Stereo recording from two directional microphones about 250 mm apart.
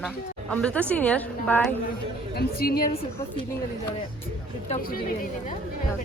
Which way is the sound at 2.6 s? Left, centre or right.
Left.